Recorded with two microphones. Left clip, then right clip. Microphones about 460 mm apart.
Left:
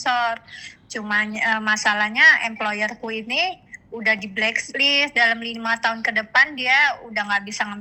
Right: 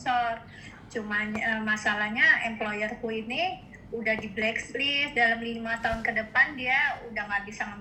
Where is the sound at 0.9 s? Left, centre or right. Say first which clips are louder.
Left 8 dB; left.